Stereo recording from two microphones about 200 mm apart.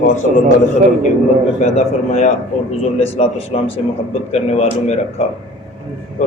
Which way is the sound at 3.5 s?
30° left (ahead or behind).